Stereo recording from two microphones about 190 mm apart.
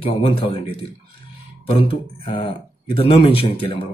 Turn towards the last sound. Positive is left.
turn(degrees=30)  # may be behind; listen again after turning